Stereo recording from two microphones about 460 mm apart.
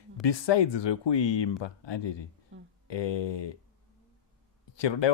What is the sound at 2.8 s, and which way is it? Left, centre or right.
Speech, left.